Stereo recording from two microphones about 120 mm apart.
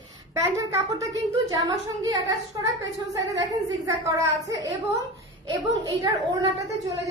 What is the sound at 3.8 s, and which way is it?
A woman's voice, 30° right (ahead or behind).